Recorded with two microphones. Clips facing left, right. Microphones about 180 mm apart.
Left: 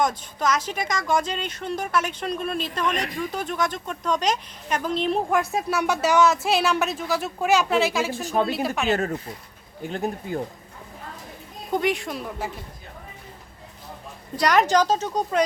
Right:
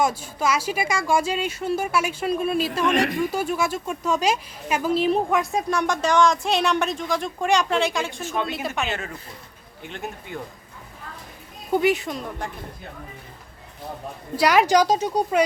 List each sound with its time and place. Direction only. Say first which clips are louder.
0.0 s a woman's voice: right 1 dB; 10° right (ahead or behind)
8.2 s speech: left 6 dB; 40° left (ahead or behind)
8.4 s a woman's voice: left 2 dB; centre (ahead or behind)
8.9 s speech: left 8 dB; 40° left (ahead or behind)
11.7 s a woman's voice: right 3 dB; 5° right (ahead or behind)
14.3 s speech: right 2 dB; 5° right (ahead or behind)